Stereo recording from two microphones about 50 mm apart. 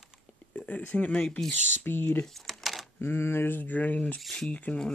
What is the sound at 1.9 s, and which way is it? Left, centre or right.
Speech, left.